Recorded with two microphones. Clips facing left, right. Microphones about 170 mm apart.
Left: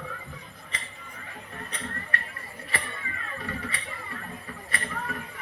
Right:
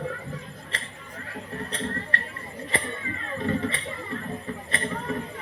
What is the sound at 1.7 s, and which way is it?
Music, 30° right (ahead or behind).